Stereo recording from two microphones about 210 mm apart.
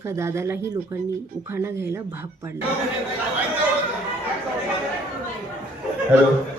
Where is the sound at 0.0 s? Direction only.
15° right (ahead or behind).